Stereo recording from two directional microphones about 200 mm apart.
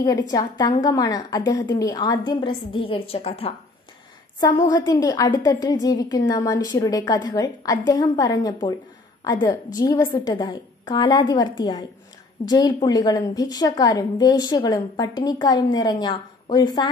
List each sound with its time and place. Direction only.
0.3 s a woman's voice: 20° left (ahead or behind)
4.4 s a woman's voice: 15° left (ahead or behind)